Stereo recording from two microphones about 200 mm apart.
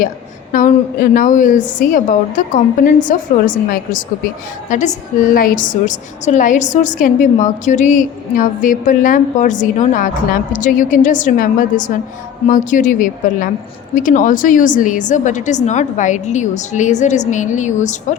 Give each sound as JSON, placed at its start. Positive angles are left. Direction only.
{"t": 0.5, "sound": "a woman's voice", "side_deg": 40}